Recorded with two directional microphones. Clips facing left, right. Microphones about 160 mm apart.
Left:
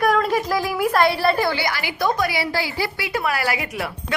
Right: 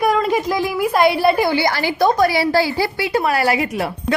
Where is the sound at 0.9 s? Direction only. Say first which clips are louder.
Right 4 dB; 20° right (ahead or behind).